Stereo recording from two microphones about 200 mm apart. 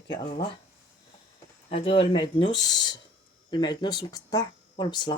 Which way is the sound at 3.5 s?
20° left (ahead or behind).